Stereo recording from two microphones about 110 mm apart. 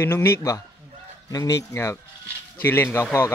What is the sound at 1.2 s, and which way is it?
A man's voice, 30° left (ahead or behind).